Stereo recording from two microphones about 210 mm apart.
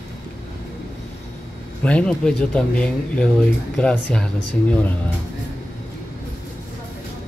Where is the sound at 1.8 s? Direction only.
5° left (ahead or behind).